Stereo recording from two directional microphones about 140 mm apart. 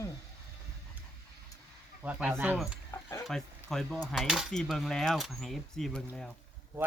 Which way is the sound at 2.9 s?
20° left (ahead or behind).